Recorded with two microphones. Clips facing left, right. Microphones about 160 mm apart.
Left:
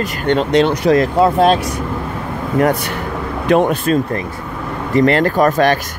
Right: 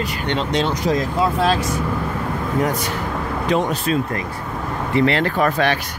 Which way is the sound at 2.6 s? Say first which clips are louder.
Left 8 dB; 60° left (ahead or behind).